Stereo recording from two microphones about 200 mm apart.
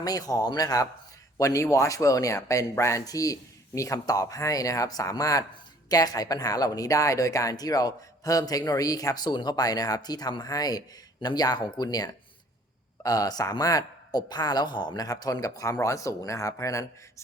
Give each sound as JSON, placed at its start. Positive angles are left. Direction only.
{"t": 0.0, "sound": "speech", "side_deg": 20}